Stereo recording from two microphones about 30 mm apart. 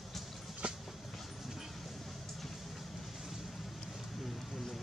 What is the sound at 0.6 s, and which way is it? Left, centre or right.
Vehicle, right.